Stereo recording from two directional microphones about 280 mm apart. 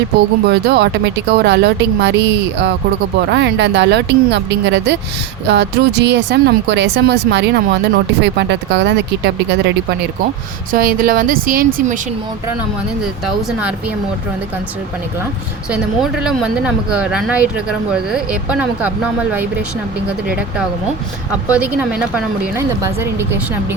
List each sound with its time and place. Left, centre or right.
0.4 s speech: right
13.2 s speech: centre
15.7 s speech: centre
21.5 s speech: centre